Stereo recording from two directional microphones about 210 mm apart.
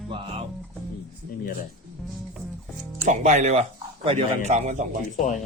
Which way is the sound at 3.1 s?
35° right (ahead or behind).